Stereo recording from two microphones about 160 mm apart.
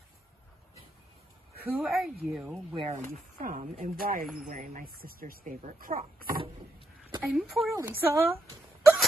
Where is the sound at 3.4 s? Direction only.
55° right (ahead or behind).